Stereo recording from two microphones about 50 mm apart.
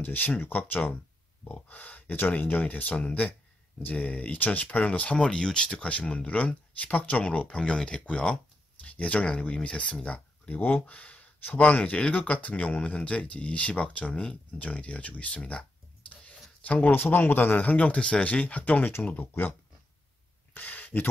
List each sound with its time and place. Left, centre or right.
0.0 s speech: left
5.1 s speech: centre
10.5 s speech: left
20.5 s a sound: left